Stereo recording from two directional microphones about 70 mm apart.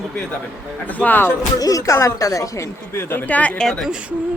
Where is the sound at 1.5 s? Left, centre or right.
Left.